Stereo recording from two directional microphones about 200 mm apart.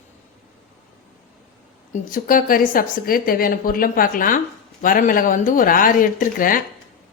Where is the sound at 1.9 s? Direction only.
45° left (ahead or behind).